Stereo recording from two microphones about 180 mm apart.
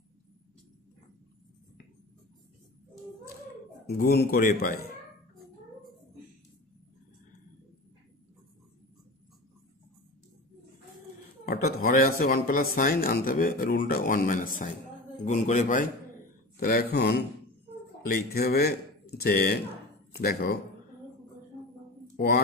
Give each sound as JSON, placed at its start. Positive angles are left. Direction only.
{"t": 3.9, "sound": "a man's voice", "side_deg": 60}
{"t": 11.4, "sound": "speech", "side_deg": 60}
{"t": 16.5, "sound": "a man's voice", "side_deg": 60}
{"t": 22.1, "sound": "a sound", "side_deg": 60}